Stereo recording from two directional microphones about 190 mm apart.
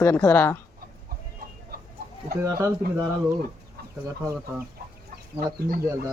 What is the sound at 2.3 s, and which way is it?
Speech, 15° right (ahead or behind).